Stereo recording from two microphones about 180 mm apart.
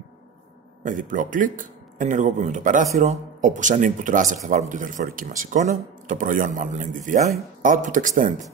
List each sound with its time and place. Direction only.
0.8 s speech: 45° right (ahead or behind)